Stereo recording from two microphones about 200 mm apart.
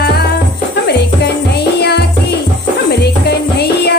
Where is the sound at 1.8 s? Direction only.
55° left (ahead or behind).